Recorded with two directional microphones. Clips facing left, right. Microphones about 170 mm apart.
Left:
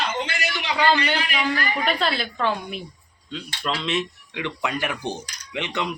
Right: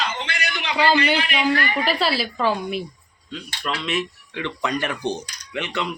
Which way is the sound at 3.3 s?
25° left (ahead or behind).